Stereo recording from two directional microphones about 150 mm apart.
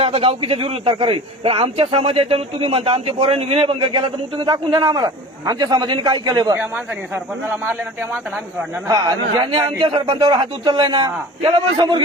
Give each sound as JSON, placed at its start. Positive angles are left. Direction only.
{"t": 0.0, "sound": "a man's voice", "side_deg": -40}
{"t": 7.4, "sound": "speech", "side_deg": -10}
{"t": 8.9, "sound": "a man's voice", "side_deg": -25}